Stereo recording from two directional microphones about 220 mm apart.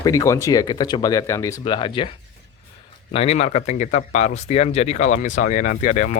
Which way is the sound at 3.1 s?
25° left (ahead or behind).